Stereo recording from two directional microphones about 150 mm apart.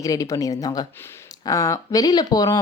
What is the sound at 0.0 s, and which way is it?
A woman's voice, 20° left (ahead or behind).